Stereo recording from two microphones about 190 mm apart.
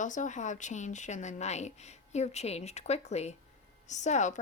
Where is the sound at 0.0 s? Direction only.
40° left (ahead or behind).